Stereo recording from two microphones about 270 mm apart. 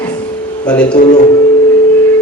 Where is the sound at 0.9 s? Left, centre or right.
Left.